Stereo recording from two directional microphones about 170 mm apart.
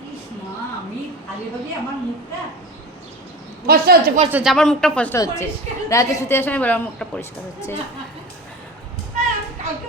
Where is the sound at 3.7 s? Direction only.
60° right (ahead or behind).